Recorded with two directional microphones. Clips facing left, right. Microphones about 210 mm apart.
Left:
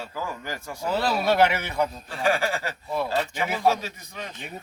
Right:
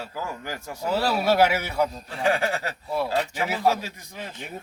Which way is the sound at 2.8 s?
5° right (ahead or behind).